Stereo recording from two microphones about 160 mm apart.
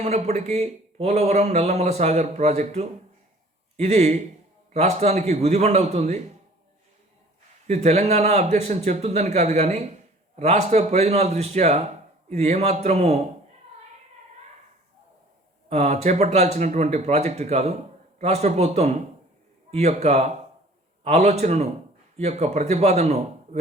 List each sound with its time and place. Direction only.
0.0 s a man's voice: 45° right (ahead or behind)
7.7 s a man's voice: 45° right (ahead or behind)
15.7 s a man's voice: 45° right (ahead or behind)